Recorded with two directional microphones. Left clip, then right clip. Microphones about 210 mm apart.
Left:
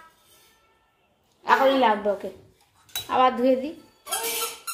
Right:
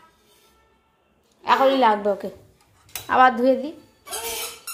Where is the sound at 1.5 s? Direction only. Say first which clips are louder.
Right 2 dB; 25° right (ahead or behind).